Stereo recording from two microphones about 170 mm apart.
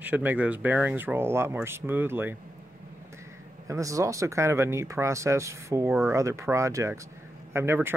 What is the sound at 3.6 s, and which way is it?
Speech, 20° right (ahead or behind).